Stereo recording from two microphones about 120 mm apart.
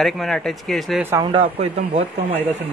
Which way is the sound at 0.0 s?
Centre (ahead or behind).